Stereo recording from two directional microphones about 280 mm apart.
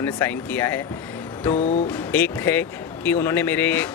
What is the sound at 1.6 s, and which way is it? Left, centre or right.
Music, left.